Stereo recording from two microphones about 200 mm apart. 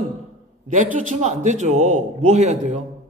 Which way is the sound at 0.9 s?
40° right (ahead or behind).